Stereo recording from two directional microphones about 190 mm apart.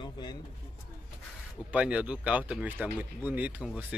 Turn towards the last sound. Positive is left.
turn(degrees=-5)  # may be behind; listen again after turning